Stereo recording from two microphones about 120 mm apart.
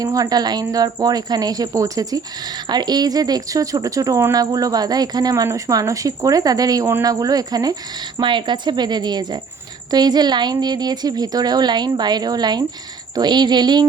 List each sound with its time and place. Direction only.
0.0 s a woman's voice: 30° right (ahead or behind)